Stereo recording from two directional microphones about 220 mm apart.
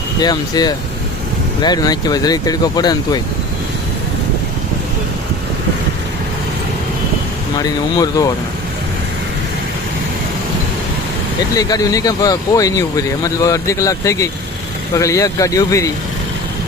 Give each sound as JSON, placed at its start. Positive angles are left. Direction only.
{"t": 0.2, "sound": "speech", "side_deg": 20}
{"t": 7.6, "sound": "speech", "side_deg": 15}
{"t": 11.5, "sound": "speech", "side_deg": 15}